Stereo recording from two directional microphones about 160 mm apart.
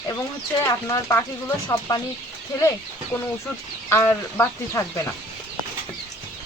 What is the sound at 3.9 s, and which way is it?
Speech, 15° left (ahead or behind).